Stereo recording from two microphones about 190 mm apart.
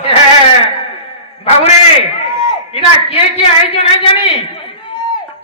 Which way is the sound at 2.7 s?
30° left (ahead or behind).